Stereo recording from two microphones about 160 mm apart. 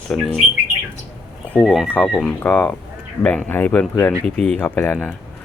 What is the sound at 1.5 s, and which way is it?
Speech, centre (ahead or behind).